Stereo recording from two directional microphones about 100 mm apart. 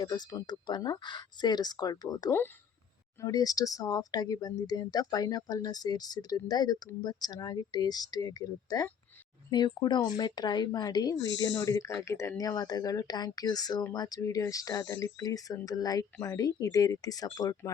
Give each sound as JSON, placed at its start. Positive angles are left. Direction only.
{"t": 0.0, "sound": "speech", "side_deg": 45}
{"t": 12.4, "sound": "speech", "side_deg": 40}